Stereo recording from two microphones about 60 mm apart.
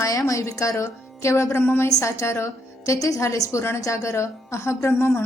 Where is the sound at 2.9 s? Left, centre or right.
Left.